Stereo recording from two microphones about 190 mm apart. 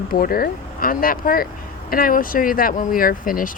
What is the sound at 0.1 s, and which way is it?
Speech, 50° left (ahead or behind).